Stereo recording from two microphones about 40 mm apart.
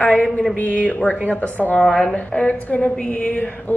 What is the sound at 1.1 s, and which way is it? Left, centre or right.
Speech, left.